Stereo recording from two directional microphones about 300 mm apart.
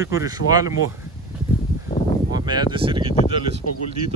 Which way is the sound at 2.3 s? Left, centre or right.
Centre.